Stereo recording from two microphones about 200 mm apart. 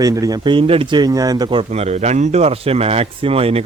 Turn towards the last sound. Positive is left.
turn(degrees=-30)  # may be behind; listen again after turning